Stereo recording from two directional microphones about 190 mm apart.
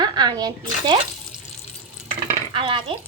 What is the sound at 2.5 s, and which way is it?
Speech, 25° right (ahead or behind).